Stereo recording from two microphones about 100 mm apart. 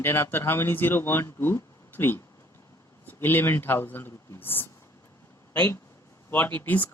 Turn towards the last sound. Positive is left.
turn(degrees=15)  # may be behind; listen again after turning